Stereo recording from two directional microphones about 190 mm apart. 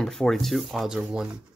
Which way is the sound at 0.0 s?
Centre (ahead or behind).